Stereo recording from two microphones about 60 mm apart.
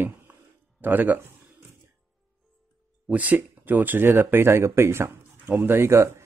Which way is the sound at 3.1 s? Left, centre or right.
Right.